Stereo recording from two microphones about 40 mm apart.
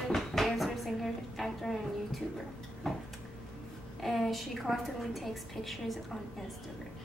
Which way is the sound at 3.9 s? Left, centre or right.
Centre.